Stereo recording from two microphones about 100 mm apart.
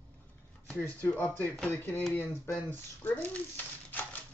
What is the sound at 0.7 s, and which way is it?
Speech, 15° left (ahead or behind).